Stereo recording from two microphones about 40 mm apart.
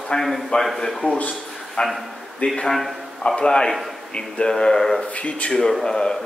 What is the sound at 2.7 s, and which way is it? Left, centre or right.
Speech, centre.